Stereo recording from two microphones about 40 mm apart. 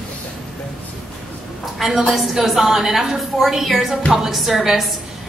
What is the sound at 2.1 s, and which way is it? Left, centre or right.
A woman's voice, centre.